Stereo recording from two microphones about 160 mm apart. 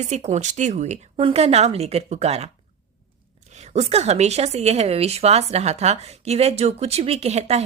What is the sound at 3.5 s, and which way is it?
A woman's voice, 45° right (ahead or behind).